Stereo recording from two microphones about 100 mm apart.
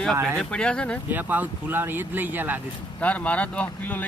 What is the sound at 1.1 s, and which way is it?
Speech, 15° right (ahead or behind).